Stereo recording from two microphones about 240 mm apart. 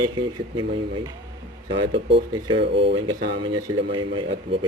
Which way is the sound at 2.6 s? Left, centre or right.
Right.